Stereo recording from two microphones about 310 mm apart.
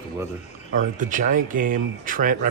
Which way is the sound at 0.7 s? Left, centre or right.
Right.